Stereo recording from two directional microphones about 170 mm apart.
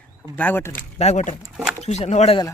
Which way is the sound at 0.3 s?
10° left (ahead or behind).